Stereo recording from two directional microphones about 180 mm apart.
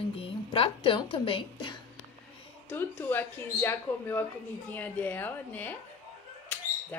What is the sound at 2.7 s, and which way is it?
Speech, 10° left (ahead or behind).